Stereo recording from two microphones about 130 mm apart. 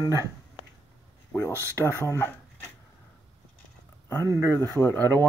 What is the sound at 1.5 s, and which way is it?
Speech, 20° right (ahead or behind).